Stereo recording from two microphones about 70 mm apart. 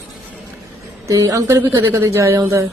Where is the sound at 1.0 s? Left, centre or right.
Right.